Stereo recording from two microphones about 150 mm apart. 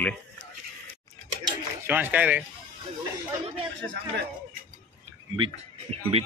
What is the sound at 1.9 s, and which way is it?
Speech, 10° right (ahead or behind).